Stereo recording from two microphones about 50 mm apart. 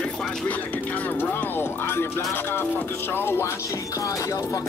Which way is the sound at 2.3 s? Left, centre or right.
Left.